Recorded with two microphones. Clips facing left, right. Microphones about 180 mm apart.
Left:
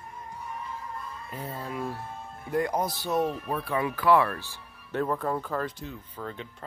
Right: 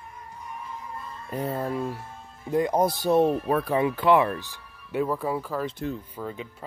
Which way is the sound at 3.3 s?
55° right (ahead or behind).